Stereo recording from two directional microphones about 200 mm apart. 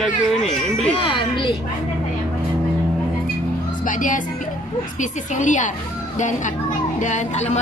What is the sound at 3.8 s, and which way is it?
Speech, 40° left (ahead or behind).